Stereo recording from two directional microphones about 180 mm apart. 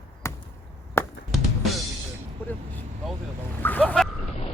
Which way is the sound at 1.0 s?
15° left (ahead or behind).